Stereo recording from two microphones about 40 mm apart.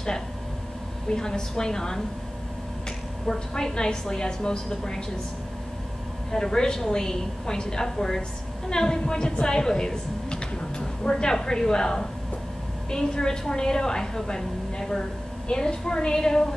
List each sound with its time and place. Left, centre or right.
1.1 s a woman's voice: centre
3.3 s a woman's voice: centre
6.3 s a woman's voice: centre